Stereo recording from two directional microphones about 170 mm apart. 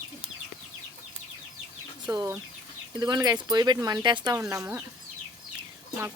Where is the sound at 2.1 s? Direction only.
20° right (ahead or behind).